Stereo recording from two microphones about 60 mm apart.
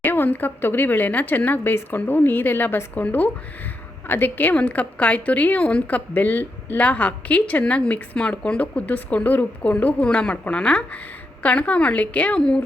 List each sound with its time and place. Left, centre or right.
0.0 s a woman's voice: left; by 12.6 s centre